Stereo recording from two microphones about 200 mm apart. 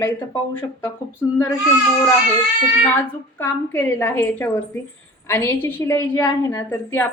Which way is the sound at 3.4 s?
10° left (ahead or behind).